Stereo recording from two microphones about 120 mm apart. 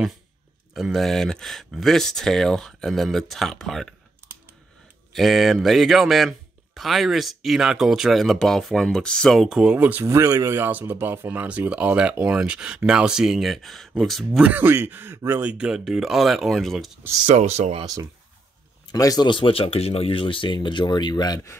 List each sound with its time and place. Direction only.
0.7 s a man's voice: centre (ahead or behind)
5.1 s a man's voice: centre (ahead or behind)
10.0 s speech: 25° right (ahead or behind); by 14.4 s centre (ahead or behind)
14.4 s a man's voice: 15° right (ahead or behind)
17.4 s speech: 65° right (ahead or behind)
18.9 s speech: 30° left (ahead or behind)
19.2 s speech: 45° left (ahead or behind)